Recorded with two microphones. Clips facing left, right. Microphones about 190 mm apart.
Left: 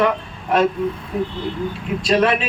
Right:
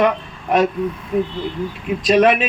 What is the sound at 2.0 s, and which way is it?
Speech, 20° right (ahead or behind).